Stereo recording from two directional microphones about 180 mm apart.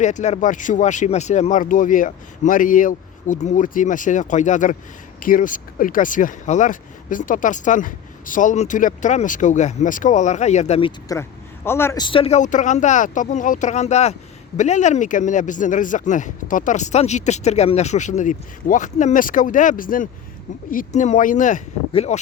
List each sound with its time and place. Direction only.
0.0 s speech: 40° left (ahead or behind)
11.1 s speech: 15° left (ahead or behind)
12.0 s speech: 30° left (ahead or behind)